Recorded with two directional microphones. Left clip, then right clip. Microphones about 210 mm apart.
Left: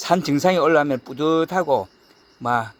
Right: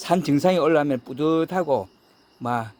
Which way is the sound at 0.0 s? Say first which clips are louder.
Left 2 dB; 5° right (ahead or behind).